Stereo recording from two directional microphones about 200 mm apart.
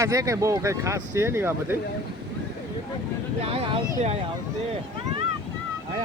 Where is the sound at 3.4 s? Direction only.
30° right (ahead or behind).